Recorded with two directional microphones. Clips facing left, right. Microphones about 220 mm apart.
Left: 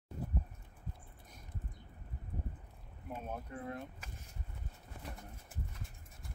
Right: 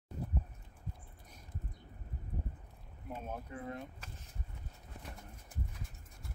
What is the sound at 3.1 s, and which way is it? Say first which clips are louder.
Speech: even; centre (ahead or behind).